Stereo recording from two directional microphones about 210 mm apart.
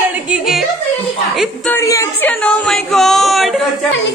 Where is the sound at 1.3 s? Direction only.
5° left (ahead or behind).